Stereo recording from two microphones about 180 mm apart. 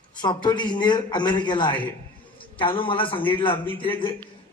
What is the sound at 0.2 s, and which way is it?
A man's voice, 25° left (ahead or behind).